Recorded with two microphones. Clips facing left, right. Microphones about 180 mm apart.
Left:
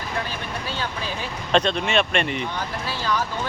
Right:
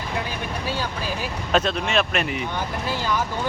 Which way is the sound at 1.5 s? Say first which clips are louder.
Left 1 dB; 5° right (ahead or behind).